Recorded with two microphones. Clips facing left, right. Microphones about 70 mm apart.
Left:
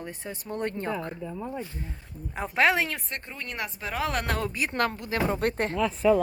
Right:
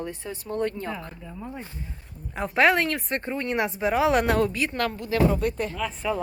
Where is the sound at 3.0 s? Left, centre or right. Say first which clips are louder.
Right 9 dB; right.